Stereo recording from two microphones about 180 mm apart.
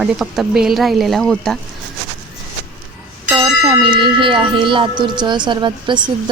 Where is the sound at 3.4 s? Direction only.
25° right (ahead or behind).